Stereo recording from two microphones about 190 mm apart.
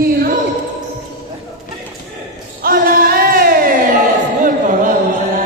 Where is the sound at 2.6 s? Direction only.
50° right (ahead or behind).